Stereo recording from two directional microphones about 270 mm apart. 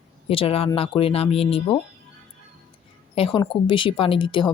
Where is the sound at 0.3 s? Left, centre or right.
Left.